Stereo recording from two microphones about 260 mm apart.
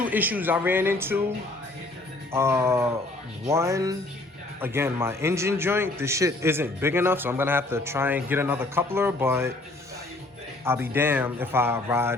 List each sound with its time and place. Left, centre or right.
0.0 s a man's voice: centre
2.3 s a man's voice: centre
10.7 s a man's voice: centre